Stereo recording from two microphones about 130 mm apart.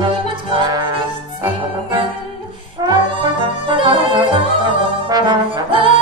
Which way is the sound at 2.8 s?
40° right (ahead or behind).